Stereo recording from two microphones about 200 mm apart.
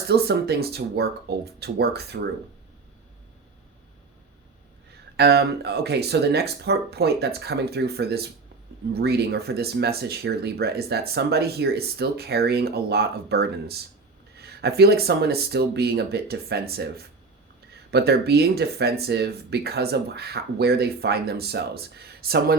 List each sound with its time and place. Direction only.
0.1 s speech: 55° right (ahead or behind)
5.1 s speech: 55° right (ahead or behind)
17.9 s speech: 55° right (ahead or behind)